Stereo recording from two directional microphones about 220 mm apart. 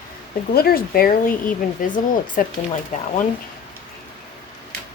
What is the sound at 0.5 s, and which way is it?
Speech, 45° left (ahead or behind).